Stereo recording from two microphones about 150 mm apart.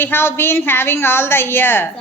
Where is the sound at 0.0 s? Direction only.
15° left (ahead or behind).